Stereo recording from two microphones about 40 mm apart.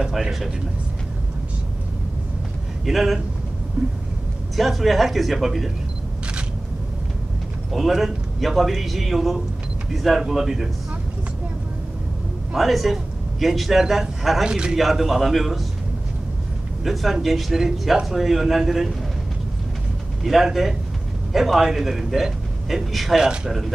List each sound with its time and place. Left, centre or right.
2.8 s a man's voice: centre
3.8 s a man's voice: right
4.6 s a man's voice: centre
7.7 s a man's voice: centre
12.5 s a man's voice: centre
14.4 s a man's voice: centre
14.8 s a man's voice: centre
16.8 s a man's voice: centre
20.2 s a man's voice: centre